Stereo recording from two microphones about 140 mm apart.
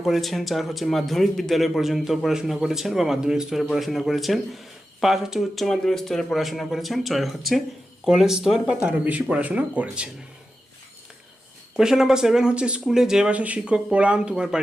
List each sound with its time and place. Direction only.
0.0 s speech: centre (ahead or behind)
11.8 s speech: 5° right (ahead or behind)